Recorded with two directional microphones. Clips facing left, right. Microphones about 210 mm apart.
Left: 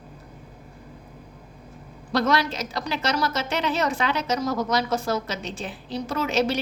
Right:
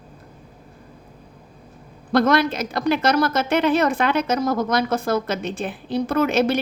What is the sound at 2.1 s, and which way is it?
A woman's voice, 55° right (ahead or behind).